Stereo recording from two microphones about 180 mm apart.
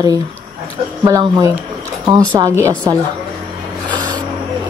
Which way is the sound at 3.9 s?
25° right (ahead or behind).